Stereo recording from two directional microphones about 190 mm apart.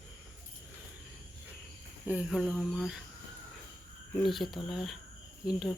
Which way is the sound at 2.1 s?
5° right (ahead or behind).